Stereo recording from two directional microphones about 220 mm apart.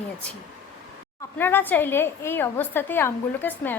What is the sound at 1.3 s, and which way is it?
A woman's voice, 10° left (ahead or behind).